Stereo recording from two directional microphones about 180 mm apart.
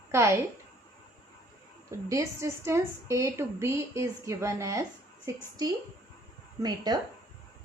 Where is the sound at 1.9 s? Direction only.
15° right (ahead or behind).